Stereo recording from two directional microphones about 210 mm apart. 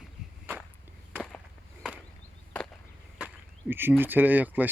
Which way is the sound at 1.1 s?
5° left (ahead or behind).